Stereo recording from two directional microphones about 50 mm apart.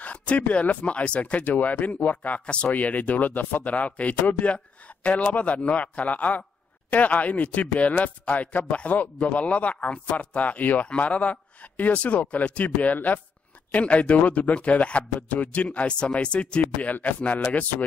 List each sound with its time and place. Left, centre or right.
0.0 s a man's voice: left
16.7 s a man's voice: left